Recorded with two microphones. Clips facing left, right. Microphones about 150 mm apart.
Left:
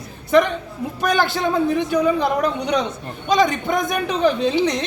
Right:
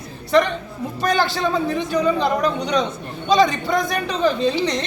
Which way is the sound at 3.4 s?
15° left (ahead or behind).